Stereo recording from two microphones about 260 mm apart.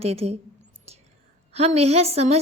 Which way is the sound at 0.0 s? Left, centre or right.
Right.